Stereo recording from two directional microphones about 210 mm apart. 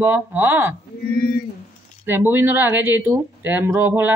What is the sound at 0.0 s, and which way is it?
Speech, 10° right (ahead or behind).